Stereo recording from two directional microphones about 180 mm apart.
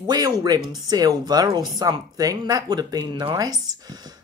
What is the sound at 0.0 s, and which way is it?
Speech, 20° right (ahead or behind).